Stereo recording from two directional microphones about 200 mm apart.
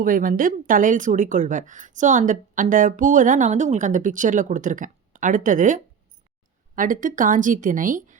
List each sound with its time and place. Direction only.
0.0 s a woman's voice: 45° right (ahead or behind)